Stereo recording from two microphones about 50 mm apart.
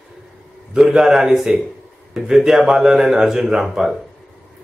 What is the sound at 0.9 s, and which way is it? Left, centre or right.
Speech, centre.